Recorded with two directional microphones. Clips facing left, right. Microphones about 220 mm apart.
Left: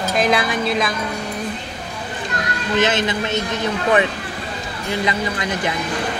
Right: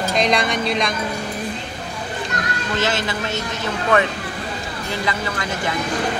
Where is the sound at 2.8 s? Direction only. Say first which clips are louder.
Left 4 dB; 20° left (ahead or behind).